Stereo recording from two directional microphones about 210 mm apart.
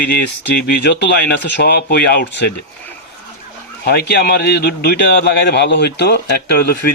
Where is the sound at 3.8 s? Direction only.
50° left (ahead or behind).